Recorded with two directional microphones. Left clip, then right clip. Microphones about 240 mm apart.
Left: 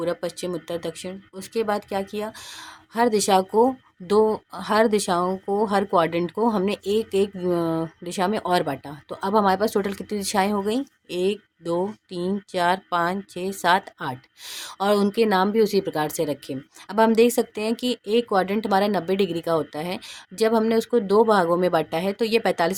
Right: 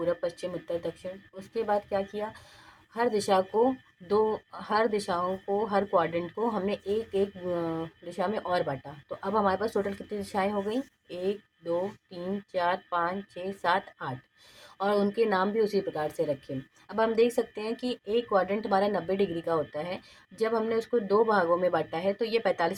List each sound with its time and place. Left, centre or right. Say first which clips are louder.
0.0 s speech: left 3 dB; left